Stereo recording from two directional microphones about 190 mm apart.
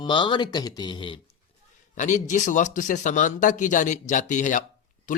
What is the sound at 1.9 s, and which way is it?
Speech, 40° left (ahead or behind).